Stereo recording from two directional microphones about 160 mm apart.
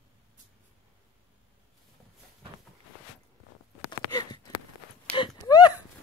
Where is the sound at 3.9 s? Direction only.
25° left (ahead or behind).